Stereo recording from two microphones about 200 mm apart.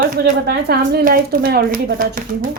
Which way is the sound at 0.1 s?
45° right (ahead or behind).